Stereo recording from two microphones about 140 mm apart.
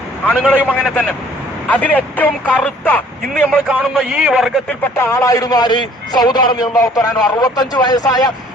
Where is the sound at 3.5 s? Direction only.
5° right (ahead or behind).